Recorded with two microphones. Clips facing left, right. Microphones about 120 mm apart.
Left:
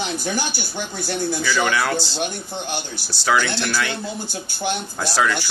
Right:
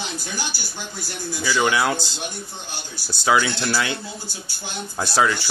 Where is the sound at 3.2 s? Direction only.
20° right (ahead or behind).